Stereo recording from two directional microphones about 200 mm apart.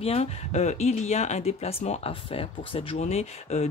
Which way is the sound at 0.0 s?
30° left (ahead or behind).